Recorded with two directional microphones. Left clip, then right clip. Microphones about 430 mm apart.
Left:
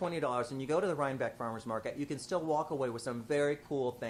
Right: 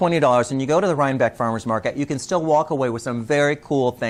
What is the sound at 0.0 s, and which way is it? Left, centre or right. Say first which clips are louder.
Speech: right 17 dB; right.